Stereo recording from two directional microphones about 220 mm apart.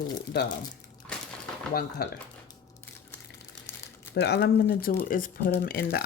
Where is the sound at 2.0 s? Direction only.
45° left (ahead or behind).